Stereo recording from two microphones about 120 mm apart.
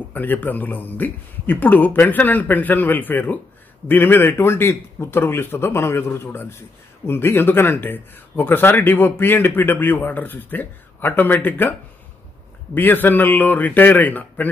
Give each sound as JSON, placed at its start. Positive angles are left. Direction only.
{"t": 0.1, "sound": "a man's voice", "side_deg": 15}
{"t": 12.7, "sound": "speech", "side_deg": 15}